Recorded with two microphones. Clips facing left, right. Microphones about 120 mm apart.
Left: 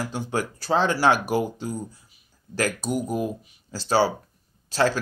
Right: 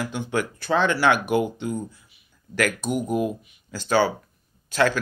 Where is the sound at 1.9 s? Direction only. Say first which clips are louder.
Even; 35° left (ahead or behind).